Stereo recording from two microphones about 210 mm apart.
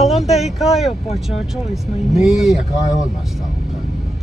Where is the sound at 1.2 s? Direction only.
Centre (ahead or behind).